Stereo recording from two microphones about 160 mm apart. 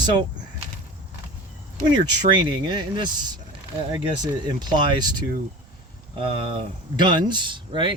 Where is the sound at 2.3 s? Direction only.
30° right (ahead or behind).